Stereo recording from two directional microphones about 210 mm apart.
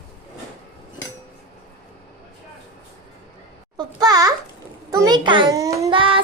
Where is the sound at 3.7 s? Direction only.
20° right (ahead or behind).